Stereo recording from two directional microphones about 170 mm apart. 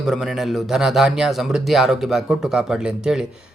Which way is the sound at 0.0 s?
Centre (ahead or behind).